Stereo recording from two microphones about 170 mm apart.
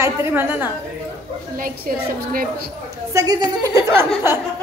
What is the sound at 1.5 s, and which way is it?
Speech, 55° right (ahead or behind).